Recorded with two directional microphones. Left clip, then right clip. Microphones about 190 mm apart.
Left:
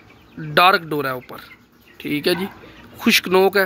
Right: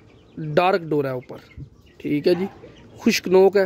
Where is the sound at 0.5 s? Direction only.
40° right (ahead or behind).